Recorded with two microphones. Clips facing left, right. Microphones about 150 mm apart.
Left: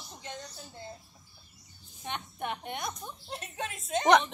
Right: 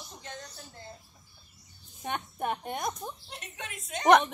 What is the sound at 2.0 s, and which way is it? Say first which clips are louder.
Speech: right 4 dB; 45° right (ahead or behind).